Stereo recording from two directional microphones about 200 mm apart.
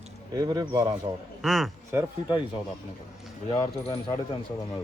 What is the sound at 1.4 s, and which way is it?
Speech, centre (ahead or behind).